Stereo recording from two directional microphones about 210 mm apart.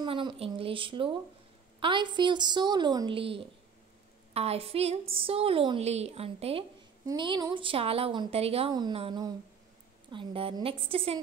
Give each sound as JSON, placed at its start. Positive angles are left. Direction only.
{"t": 0.0, "sound": "a woman's voice", "side_deg": -20}